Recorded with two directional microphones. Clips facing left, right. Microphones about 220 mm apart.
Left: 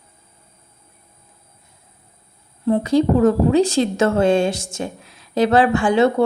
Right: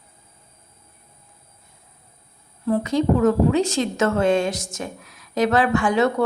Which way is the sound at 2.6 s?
30° left (ahead or behind).